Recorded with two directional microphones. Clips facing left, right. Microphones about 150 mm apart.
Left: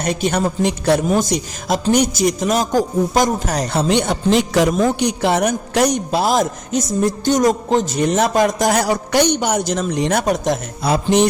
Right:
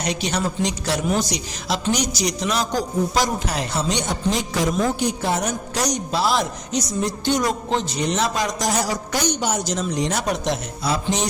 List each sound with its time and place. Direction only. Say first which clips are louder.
0.0 s a man's voice: left 5 dB; 50° left (ahead or behind)
3.8 s a woman's voice: left 9 dB; 60° left (ahead or behind)